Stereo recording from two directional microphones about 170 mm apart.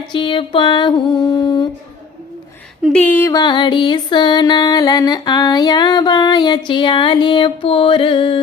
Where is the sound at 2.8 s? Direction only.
10° left (ahead or behind).